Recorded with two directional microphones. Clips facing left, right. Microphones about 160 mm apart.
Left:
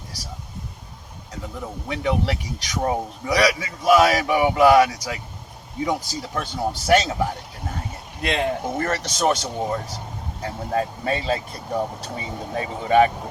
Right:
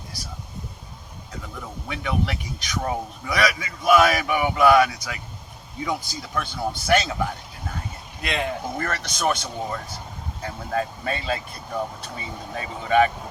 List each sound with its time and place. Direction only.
1.9 s speech: 30° left (ahead or behind)